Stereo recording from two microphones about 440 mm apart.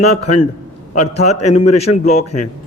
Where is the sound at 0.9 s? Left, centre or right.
Centre.